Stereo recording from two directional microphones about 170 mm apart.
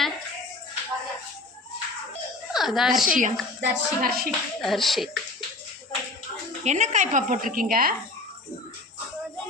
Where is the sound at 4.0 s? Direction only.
60° right (ahead or behind).